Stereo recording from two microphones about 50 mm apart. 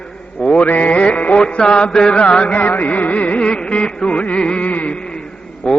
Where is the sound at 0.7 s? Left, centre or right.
Left.